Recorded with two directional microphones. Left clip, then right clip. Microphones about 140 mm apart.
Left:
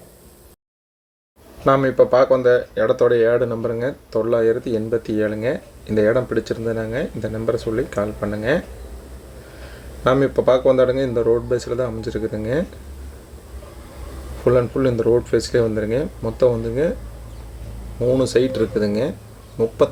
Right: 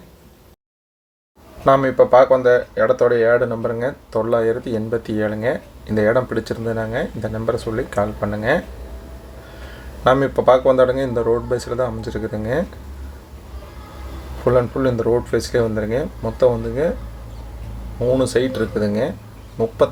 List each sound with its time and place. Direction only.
1.6 s speech: 15° left (ahead or behind)
10.0 s speech: 15° left (ahead or behind)
14.4 s speech: 15° left (ahead or behind)
18.0 s speech: 15° left (ahead or behind)